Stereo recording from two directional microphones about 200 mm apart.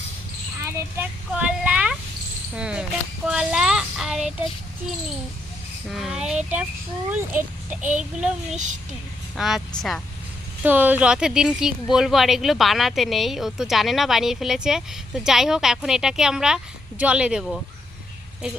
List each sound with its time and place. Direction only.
0.6 s speech: 10° right (ahead or behind)
3.2 s child singing: 5° right (ahead or behind)
5.9 s a child's voice: centre (ahead or behind)
9.3 s speech: centre (ahead or behind)